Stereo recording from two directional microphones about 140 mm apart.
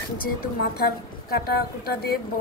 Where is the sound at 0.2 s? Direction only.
90° left.